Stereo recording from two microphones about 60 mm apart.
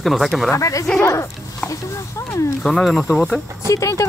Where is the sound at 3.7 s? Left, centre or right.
Left.